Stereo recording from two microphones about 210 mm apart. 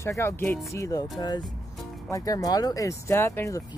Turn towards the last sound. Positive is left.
turn(degrees=15)  # may be behind; listen again after turning